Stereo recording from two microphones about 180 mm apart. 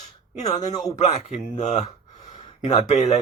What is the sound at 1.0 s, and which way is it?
Speech, 35° left (ahead or behind).